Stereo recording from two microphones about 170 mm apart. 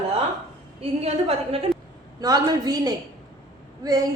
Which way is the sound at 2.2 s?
20° right (ahead or behind).